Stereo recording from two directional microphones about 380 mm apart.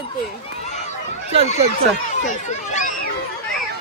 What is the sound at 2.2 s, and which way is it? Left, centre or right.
Speech, centre.